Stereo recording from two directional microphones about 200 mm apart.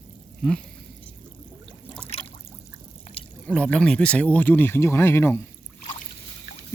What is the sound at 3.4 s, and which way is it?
Speech, 5° left (ahead or behind).